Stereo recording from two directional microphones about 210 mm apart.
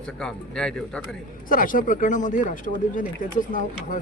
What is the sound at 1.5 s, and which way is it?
Speech, 40° left (ahead or behind).